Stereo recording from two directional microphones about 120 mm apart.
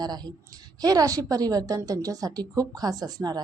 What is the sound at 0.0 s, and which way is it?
A woman's voice, 35° right (ahead or behind).